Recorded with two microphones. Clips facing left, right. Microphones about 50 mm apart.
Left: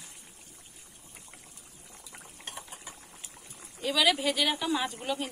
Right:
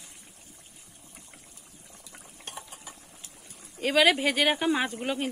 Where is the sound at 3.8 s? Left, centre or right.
Right.